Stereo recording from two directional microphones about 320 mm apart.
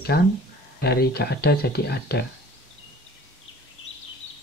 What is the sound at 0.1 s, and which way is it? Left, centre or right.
Speech, left.